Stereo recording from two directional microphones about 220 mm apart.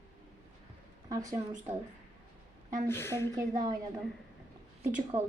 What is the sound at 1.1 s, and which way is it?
Speech, 15° right (ahead or behind).